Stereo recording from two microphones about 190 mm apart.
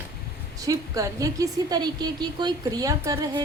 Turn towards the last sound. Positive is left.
turn(degrees=-15)  # may be behind; listen again after turning